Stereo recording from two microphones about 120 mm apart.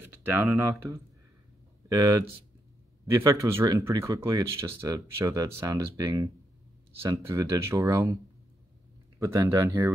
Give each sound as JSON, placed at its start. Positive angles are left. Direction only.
{"t": 0.0, "sound": "a sound", "side_deg": -20}
{"t": 0.6, "sound": "speech", "side_deg": -25}
{"t": 9.2, "sound": "speech", "side_deg": -25}